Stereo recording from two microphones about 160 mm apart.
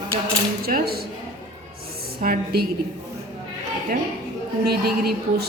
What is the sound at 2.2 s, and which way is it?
Speech, 70° right (ahead or behind).